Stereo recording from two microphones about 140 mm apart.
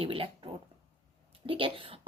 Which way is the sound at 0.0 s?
40° right (ahead or behind).